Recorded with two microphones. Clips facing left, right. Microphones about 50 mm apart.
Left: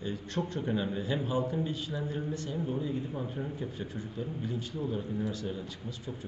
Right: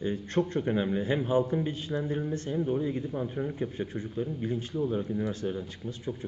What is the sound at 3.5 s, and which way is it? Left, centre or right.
Speech, right.